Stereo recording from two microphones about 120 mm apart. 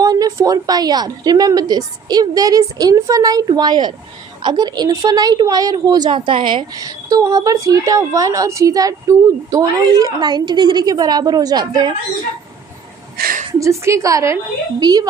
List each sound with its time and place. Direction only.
0.0 s a woman's voice: 30° right (ahead or behind)
6.7 s a woman's voice: 30° right (ahead or behind)
13.5 s a woman's voice: 25° right (ahead or behind)